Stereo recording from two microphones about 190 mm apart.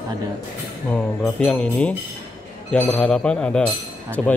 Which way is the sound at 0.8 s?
5° left (ahead or behind).